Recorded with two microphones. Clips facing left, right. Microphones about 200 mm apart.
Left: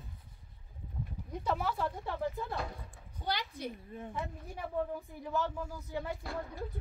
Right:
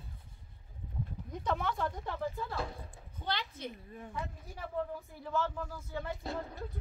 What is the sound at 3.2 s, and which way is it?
Speech, 10° left (ahead or behind).